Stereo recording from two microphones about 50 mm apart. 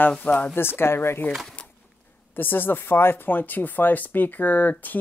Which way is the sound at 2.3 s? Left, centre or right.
Left.